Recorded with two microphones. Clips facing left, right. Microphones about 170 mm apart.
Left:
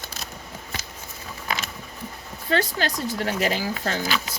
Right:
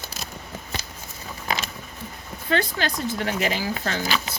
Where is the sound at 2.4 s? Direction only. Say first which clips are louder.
Even; 40° left (ahead or behind).